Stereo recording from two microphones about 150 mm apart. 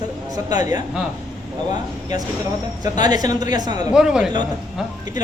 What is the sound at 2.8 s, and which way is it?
A man's voice, 25° right (ahead or behind).